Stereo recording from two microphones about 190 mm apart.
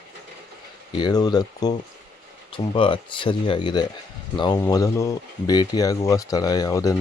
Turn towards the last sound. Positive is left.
turn(degrees=20)  # may be behind; listen again after turning